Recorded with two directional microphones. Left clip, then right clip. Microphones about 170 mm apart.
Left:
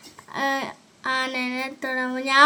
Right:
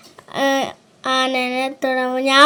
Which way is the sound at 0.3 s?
30° right (ahead or behind).